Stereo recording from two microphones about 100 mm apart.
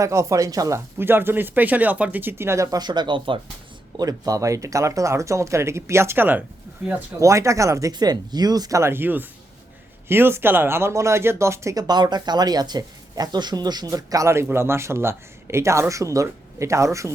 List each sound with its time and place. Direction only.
0.0 s speech: 30° right (ahead or behind)
0.9 s speech: 20° right (ahead or behind); by 3.4 s 55° right (ahead or behind)
3.9 s speech: 40° right (ahead or behind); by 6.4 s 20° right (ahead or behind)
7.2 s speech: 30° right (ahead or behind)
8.8 s speech: 20° right (ahead or behind)